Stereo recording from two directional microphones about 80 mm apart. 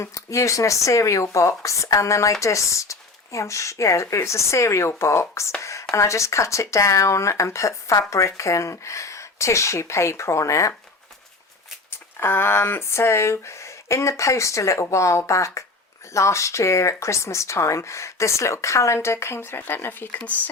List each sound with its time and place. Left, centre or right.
0.0 s speech: left
11.9 s speech: left